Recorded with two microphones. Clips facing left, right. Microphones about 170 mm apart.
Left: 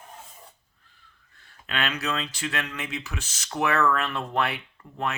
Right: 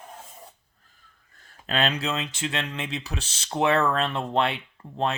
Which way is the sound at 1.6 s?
30° right (ahead or behind).